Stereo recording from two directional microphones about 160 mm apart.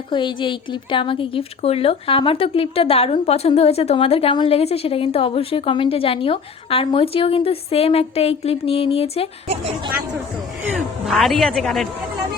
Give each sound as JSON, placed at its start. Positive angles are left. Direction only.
{"t": 0.1, "sound": "a woman's voice", "side_deg": 30}
{"t": 9.5, "sound": "speech", "side_deg": -40}
{"t": 10.7, "sound": "a man's voice", "side_deg": 0}